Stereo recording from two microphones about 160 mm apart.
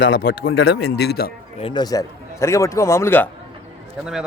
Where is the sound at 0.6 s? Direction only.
90° left.